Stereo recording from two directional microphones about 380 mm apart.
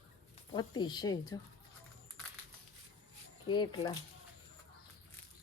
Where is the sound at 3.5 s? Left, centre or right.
Centre.